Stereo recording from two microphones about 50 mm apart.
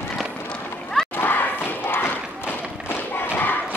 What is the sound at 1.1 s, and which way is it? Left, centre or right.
Thump, left.